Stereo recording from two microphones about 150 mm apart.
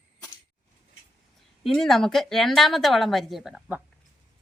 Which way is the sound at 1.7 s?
Centre (ahead or behind).